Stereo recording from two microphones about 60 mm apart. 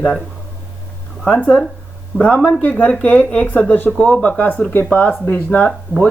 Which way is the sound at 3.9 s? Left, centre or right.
Centre.